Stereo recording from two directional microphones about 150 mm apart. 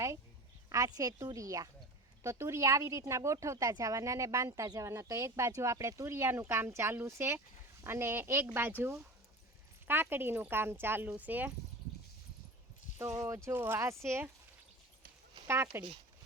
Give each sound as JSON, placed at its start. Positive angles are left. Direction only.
{"t": 0.7, "sound": "speech", "side_deg": -20}
{"t": 13.2, "sound": "speech", "side_deg": -15}
{"t": 15.4, "sound": "speech", "side_deg": -15}